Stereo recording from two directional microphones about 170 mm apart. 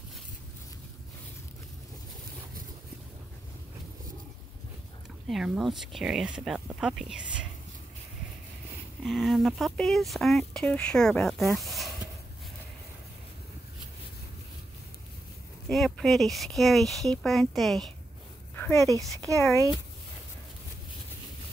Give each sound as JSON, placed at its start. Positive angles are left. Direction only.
{"t": 5.3, "sound": "speech", "side_deg": 0}
{"t": 9.0, "sound": "speech", "side_deg": 0}
{"t": 15.7, "sound": "speech", "side_deg": 0}
{"t": 18.5, "sound": "dog", "side_deg": 10}
{"t": 18.9, "sound": "speech", "side_deg": -20}